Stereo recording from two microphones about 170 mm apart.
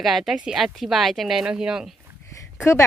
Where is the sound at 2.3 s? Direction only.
15° left (ahead or behind).